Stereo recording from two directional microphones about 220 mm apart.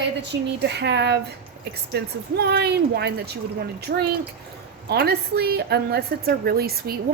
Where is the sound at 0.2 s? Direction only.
50° right (ahead or behind).